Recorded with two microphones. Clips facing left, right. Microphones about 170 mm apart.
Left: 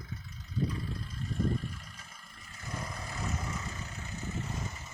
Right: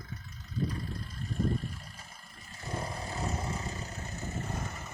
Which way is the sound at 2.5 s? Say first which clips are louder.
Right 4 dB; 30° right (ahead or behind).